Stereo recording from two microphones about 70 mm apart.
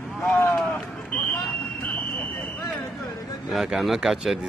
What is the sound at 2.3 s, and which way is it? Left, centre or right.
Fire alarm, left.